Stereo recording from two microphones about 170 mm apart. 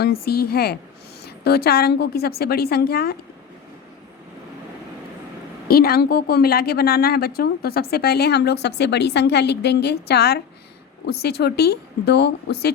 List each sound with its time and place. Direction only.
0.0 s a woman's voice: 65° left (ahead or behind)
5.6 s a woman's voice: 65° left (ahead or behind)